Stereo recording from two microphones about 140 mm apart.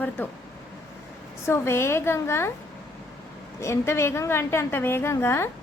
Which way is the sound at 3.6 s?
20° left (ahead or behind).